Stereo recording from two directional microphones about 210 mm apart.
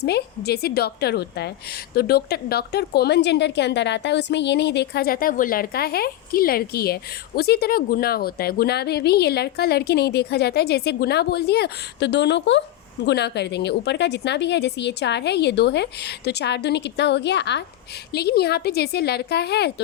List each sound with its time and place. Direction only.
0.0 s a woman's voice: 50° left (ahead or behind)